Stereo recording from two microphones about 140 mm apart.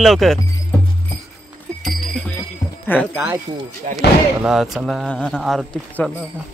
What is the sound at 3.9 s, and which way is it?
Speech, 55° right (ahead or behind).